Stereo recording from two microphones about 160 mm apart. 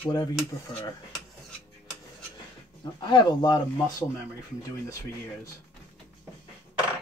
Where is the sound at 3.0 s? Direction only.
30° left (ahead or behind).